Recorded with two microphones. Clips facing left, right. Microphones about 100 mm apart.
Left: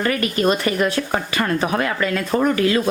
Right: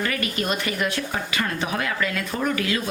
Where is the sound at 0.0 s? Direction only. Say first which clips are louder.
Left 7 dB; 40° left (ahead or behind).